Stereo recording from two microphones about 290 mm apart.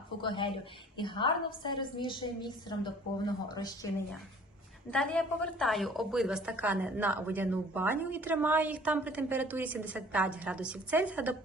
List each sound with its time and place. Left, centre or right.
0.2 s a woman's voice: centre
3.8 s a woman's voice: centre